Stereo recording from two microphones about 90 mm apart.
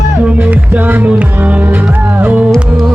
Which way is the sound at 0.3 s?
15° right (ahead or behind).